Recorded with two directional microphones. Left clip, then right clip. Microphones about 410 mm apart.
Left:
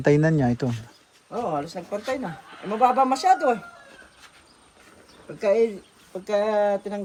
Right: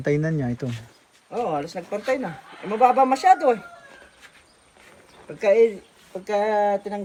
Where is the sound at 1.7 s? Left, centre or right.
Left.